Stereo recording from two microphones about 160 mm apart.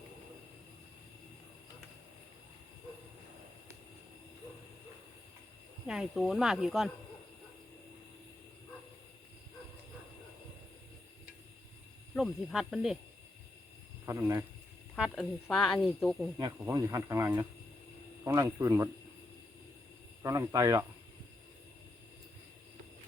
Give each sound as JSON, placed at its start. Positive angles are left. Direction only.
{"t": 5.8, "sound": "speech", "side_deg": -5}
{"t": 12.1, "sound": "speech", "side_deg": 0}
{"t": 14.0, "sound": "speech", "side_deg": -20}
{"t": 14.9, "sound": "speech", "side_deg": -5}
{"t": 16.4, "sound": "speech", "side_deg": -20}
{"t": 20.2, "sound": "speech", "side_deg": -20}